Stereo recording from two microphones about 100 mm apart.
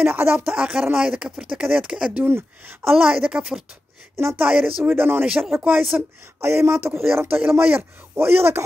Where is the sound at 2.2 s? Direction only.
25° right (ahead or behind).